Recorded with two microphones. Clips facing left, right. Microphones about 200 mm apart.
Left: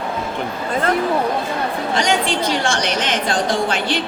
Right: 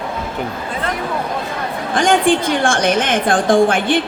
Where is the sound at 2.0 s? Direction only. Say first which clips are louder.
Right 7 dB; 50° right (ahead or behind).